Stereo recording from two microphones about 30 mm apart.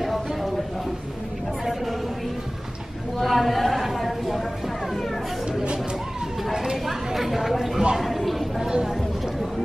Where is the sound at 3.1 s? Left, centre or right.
Centre.